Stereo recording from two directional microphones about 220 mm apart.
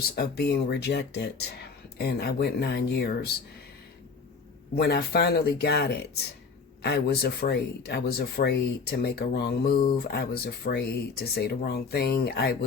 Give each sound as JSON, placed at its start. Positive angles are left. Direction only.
{"t": 0.2, "sound": "speech", "side_deg": 45}
{"t": 4.7, "sound": "speech", "side_deg": 45}